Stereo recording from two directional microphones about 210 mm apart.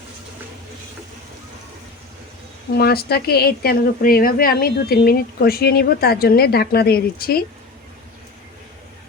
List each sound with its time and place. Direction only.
2.7 s a woman's voice: 50° left (ahead or behind)